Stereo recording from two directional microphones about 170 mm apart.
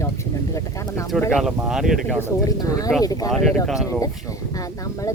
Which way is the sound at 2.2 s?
20° left (ahead or behind).